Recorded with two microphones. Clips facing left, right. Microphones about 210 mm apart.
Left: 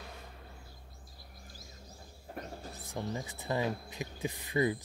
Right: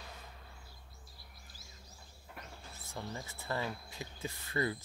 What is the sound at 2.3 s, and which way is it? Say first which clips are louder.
Bird: left 9 dB; 40° left (ahead or behind).